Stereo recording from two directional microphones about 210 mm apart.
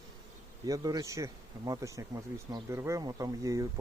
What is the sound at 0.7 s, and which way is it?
A man's voice, 15° right (ahead or behind).